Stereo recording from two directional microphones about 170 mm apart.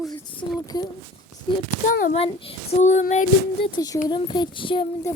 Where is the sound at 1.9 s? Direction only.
55° left (ahead or behind).